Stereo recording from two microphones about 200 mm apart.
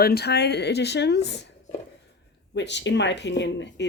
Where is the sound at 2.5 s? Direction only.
60° left (ahead or behind).